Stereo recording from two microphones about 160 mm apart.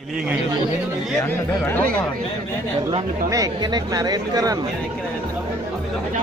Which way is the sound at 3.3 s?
20° right (ahead or behind).